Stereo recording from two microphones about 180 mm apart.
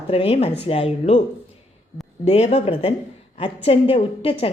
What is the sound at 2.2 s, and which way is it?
Speech, 35° left (ahead or behind).